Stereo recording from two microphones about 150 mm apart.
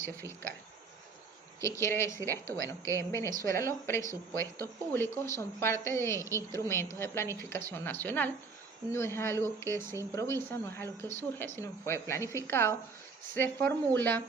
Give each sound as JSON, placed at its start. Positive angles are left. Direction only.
{"t": 1.6, "sound": "speech", "side_deg": 15}